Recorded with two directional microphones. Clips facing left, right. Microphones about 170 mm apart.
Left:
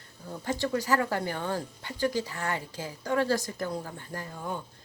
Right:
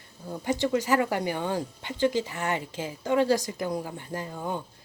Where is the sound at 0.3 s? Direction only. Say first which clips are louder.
Right 4 dB; 20° right (ahead or behind).